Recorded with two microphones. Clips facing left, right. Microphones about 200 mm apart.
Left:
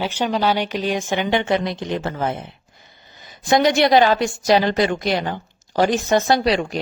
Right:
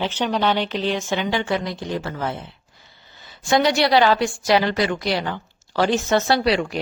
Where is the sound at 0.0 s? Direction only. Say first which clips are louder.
Left 1 dB; 5° left (ahead or behind).